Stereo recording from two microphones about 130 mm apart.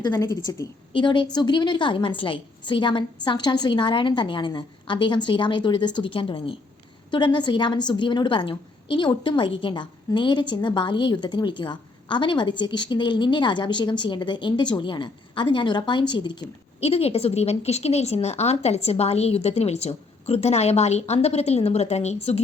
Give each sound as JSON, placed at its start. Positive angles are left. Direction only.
{"t": 0.5, "sound": "a woman's voice", "side_deg": 25}
{"t": 0.9, "sound": "a woman's voice", "side_deg": 40}
{"t": 16.8, "sound": "speech", "side_deg": 50}